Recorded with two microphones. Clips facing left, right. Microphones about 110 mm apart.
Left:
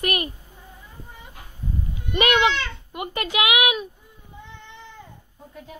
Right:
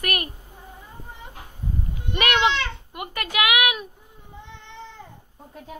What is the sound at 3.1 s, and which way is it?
Speech, 50° right (ahead or behind).